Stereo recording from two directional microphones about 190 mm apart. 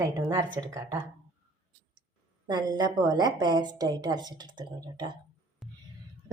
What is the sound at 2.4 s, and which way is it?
A woman's voice, 20° right (ahead or behind).